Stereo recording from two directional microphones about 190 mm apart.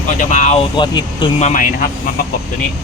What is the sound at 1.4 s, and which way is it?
Speech, 45° left (ahead or behind).